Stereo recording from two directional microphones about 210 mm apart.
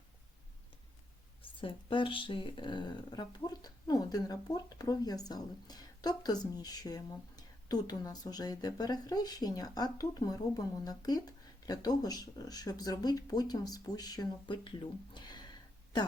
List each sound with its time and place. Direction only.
1.4 s speech: 25° left (ahead or behind)